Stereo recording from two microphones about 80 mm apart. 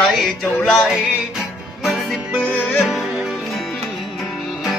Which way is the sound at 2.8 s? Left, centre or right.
Centre.